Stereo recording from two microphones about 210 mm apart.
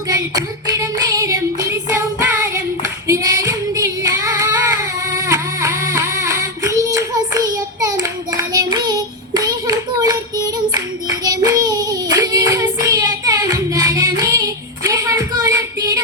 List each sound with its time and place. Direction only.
0.1 s singing: 15° right (ahead or behind)
11.2 s child singing: 15° right (ahead or behind)
14.2 s female singing: 15° right (ahead or behind)